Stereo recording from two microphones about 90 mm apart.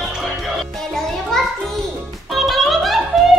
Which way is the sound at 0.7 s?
5° left (ahead or behind).